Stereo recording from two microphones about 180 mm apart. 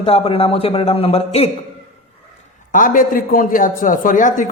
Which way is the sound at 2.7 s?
50° left (ahead or behind).